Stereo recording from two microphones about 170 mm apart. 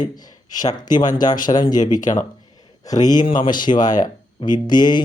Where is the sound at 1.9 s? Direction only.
50° left (ahead or behind).